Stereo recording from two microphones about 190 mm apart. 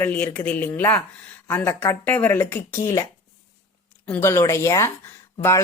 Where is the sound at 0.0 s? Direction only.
10° left (ahead or behind).